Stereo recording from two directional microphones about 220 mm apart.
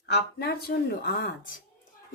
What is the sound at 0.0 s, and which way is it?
Speech, 45° left (ahead or behind).